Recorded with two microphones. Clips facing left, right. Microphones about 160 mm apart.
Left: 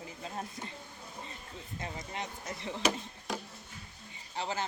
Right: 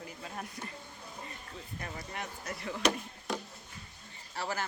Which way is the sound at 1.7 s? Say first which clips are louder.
Left 2 dB; 20° left (ahead or behind).